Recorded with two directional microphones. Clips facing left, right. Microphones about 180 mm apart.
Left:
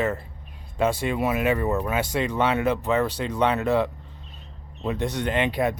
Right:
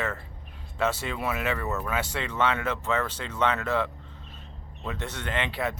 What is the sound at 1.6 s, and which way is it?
Speech, 30° left (ahead or behind).